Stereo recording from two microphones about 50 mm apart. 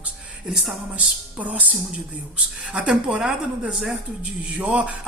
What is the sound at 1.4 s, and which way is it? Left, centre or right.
Speech, right.